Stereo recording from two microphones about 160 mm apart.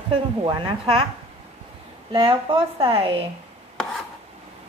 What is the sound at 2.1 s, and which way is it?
A woman's voice, 30° right (ahead or behind).